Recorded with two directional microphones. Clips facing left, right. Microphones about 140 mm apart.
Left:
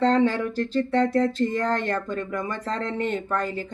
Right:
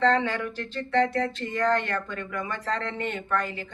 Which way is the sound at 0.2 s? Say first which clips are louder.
Left 7 dB; 40° left (ahead or behind).